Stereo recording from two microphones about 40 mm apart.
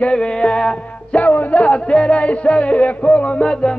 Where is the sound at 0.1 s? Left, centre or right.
Left.